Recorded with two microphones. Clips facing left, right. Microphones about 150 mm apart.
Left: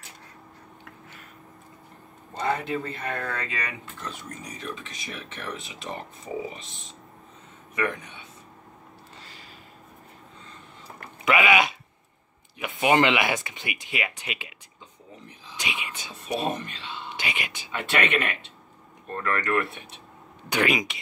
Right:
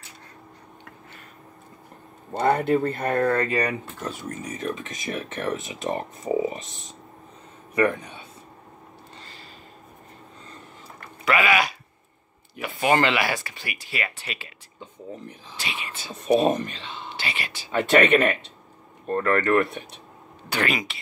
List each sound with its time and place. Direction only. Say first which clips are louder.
2.3 s speech: right 7 dB; 50° right (ahead or behind); by 8.3 s 35° right (ahead or behind)
11.2 s speech: even; 15° left (ahead or behind)
15.5 s speech: left 1 dB; 15° left (ahead or behind)
16.1 s speech: right 9 dB; 40° right (ahead or behind)
17.2 s speech: even; 15° left (ahead or behind)
17.6 s speech: right 8 dB; 40° right (ahead or behind)
20.4 s speech: left 2 dB; 15° left (ahead or behind)